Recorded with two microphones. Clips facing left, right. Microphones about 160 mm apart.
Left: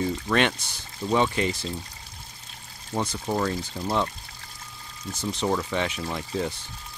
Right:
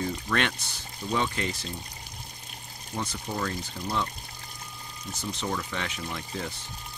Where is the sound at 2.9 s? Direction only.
35° left (ahead or behind).